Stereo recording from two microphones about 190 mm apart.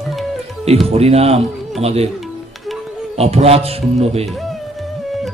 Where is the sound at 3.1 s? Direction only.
30° right (ahead or behind).